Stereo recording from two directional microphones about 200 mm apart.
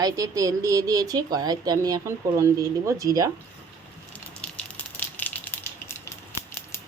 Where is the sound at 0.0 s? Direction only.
15° right (ahead or behind).